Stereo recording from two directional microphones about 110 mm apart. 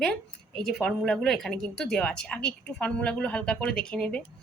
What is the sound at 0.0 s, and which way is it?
A woman's voice, 5° left (ahead or behind).